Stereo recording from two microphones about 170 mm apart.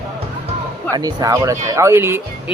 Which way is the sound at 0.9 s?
20° right (ahead or behind).